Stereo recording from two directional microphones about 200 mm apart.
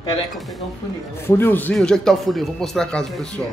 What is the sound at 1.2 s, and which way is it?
Speech, 10° left (ahead or behind).